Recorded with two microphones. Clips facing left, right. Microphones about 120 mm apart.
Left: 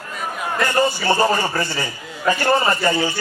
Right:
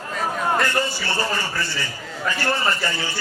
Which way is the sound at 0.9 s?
50° left (ahead or behind).